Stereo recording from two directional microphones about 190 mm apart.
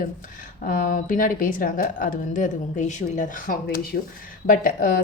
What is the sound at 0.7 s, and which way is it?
A woman's voice, 45° left (ahead or behind).